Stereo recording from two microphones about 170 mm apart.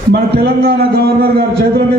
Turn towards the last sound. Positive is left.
turn(degrees=-65)  # may be behind; listen again after turning